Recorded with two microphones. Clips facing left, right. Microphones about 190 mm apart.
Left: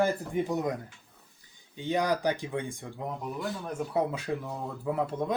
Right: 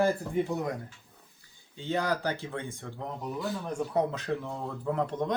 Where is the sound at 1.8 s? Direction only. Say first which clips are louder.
Left 2 dB; 15° left (ahead or behind).